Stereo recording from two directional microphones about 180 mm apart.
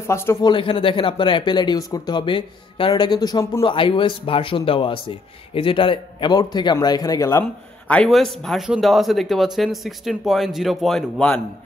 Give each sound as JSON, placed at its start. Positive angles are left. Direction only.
{"t": 0.0, "sound": "speech", "side_deg": 15}
{"t": 7.9, "sound": "speech", "side_deg": 5}